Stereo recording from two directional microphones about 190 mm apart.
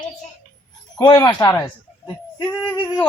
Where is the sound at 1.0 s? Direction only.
20° left (ahead or behind).